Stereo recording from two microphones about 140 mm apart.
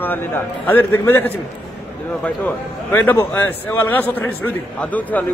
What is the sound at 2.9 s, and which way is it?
A man's voice, 15° left (ahead or behind).